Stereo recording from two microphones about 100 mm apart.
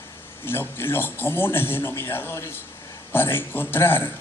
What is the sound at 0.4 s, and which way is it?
A man's voice, 20° left (ahead or behind).